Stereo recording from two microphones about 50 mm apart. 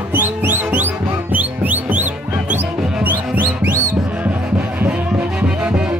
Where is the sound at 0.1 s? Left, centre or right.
Right.